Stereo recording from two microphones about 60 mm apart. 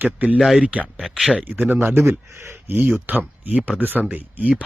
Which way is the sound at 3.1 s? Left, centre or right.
Right.